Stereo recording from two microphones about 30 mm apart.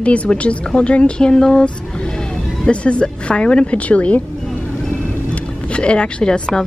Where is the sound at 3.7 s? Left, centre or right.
Left.